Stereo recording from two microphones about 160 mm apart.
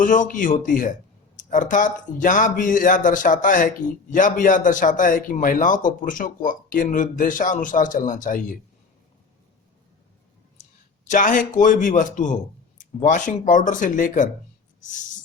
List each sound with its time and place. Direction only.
0.0 s speech: 55° left (ahead or behind)
11.0 s a man's voice: 55° left (ahead or behind)